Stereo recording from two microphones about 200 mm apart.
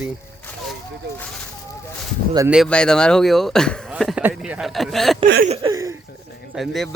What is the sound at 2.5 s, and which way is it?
Speech, centre (ahead or behind).